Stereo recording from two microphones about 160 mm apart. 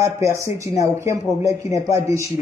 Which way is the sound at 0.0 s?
20° right (ahead or behind).